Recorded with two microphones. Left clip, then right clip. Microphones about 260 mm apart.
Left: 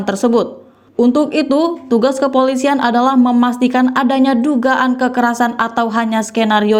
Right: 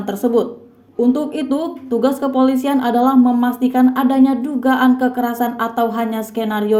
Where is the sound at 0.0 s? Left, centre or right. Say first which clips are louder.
Left 3 dB; left.